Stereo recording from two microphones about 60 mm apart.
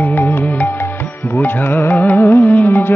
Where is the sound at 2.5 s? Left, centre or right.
Left.